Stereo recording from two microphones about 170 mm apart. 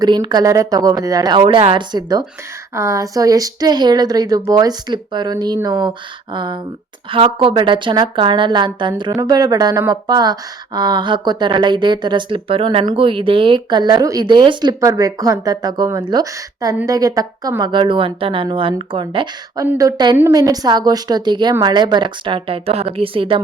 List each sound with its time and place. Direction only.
0.0 s a woman's voice: 25° right (ahead or behind)